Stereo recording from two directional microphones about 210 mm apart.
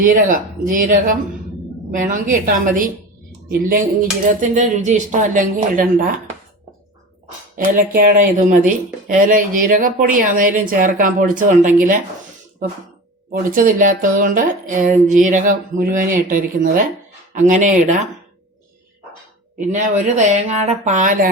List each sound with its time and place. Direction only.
0.0 s speech: 40° right (ahead or behind)
4.3 s speech: 35° right (ahead or behind)
7.5 s speech: 40° right (ahead or behind)
13.5 s speech: 40° right (ahead or behind)
19.5 s speech: 35° right (ahead or behind)